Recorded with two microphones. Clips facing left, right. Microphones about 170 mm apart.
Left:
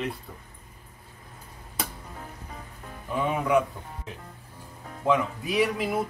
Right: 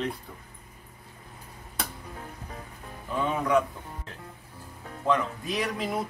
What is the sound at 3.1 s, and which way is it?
Speech, 10° left (ahead or behind).